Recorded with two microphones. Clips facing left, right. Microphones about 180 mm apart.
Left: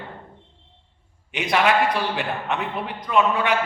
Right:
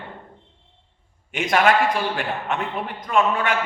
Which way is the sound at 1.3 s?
45° right (ahead or behind).